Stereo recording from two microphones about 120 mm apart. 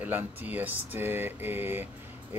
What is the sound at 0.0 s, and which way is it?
Speech, 15° right (ahead or behind).